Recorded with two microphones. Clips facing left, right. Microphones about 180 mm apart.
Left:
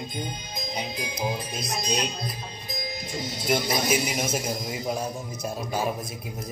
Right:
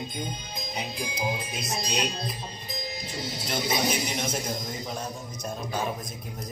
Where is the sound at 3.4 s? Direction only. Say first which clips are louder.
Left 3 dB; 5° left (ahead or behind).